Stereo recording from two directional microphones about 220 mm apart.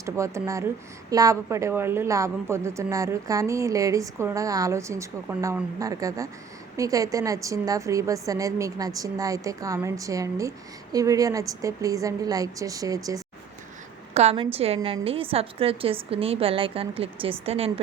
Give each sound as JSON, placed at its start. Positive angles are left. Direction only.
{"t": 0.0, "sound": "a woman's voice", "side_deg": -15}
{"t": 14.1, "sound": "a woman's voice", "side_deg": -30}